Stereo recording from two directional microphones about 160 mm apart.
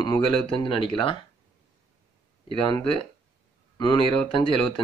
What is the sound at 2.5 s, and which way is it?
Speech, 35° left (ahead or behind).